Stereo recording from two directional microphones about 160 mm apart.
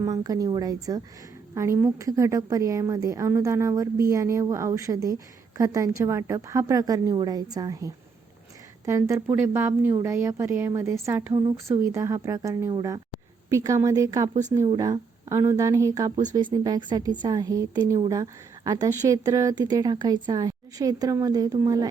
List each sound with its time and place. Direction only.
0.0 s a woman's voice: 25° right (ahead or behind)